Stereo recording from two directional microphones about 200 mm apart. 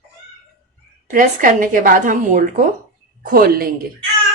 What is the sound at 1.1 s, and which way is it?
A woman's voice, 40° right (ahead or behind).